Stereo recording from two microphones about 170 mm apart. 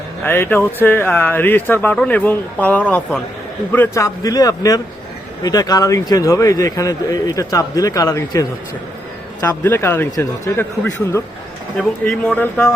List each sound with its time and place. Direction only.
0.3 s a man's voice: 15° left (ahead or behind)